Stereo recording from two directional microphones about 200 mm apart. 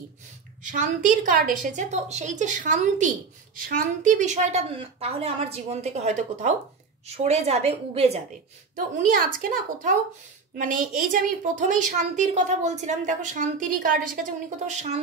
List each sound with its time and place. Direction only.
0.7 s a woman's voice: 40° right (ahead or behind)
8.7 s a woman's voice: 45° right (ahead or behind)